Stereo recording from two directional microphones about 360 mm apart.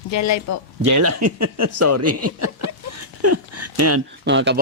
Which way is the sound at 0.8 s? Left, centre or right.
Right.